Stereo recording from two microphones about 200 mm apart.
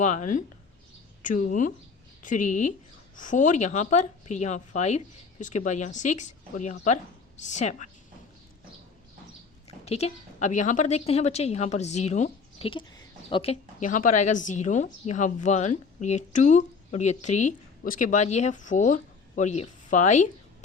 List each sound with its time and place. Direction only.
0.0 s a woman's voice: 40° left (ahead or behind)
9.8 s a woman's voice: 30° left (ahead or behind)